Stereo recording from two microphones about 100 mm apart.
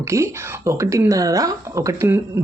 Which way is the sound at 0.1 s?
30° right (ahead or behind).